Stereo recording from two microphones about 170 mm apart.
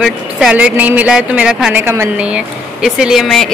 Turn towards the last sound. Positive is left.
turn(degrees=0)  # may be behind; listen again after turning